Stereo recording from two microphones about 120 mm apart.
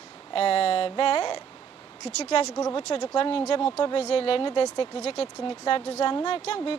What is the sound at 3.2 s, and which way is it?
A woman's voice, 50° left (ahead or behind).